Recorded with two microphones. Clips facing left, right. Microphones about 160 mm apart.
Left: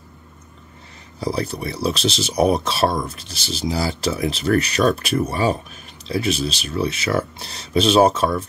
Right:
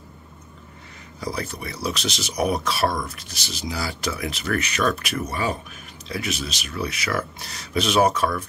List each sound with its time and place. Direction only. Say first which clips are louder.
1.2 s speech: left 6 dB; 30° left (ahead or behind)